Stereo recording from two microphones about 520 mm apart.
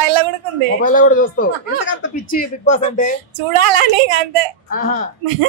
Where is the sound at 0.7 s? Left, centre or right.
Centre.